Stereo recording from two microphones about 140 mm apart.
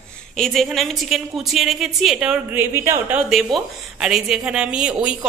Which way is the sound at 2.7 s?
15° right (ahead or behind).